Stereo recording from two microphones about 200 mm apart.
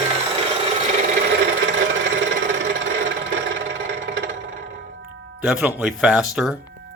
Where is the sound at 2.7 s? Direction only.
65° right (ahead or behind).